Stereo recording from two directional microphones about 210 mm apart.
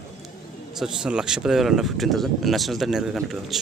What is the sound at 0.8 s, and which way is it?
Speech, 5° right (ahead or behind).